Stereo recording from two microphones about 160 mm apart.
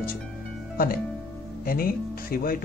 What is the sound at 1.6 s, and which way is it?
Speech, 65° left (ahead or behind).